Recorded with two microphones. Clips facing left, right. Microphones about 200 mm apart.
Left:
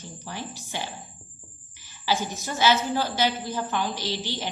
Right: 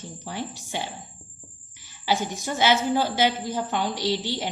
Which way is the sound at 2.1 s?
20° right (ahead or behind).